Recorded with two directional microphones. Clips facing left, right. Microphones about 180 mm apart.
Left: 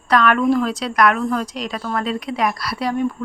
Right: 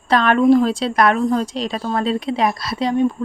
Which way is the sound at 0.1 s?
30° right (ahead or behind).